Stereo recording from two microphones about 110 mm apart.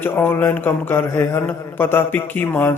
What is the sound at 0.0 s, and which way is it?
A man's voice, 20° left (ahead or behind).